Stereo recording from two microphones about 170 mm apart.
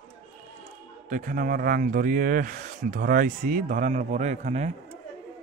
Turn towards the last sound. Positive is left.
turn(degrees=-45)  # may be behind; listen again after turning